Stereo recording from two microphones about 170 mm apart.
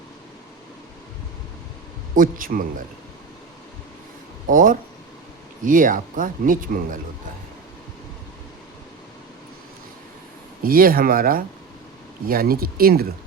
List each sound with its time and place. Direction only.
2.1 s speech: 55° right (ahead or behind)
4.4 s speech: 50° right (ahead or behind)
10.6 s speech: 60° right (ahead or behind)